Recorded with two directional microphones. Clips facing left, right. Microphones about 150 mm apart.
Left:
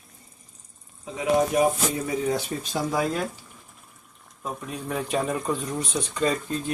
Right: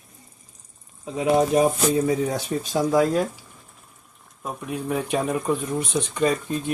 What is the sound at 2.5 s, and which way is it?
Speech, 5° right (ahead or behind).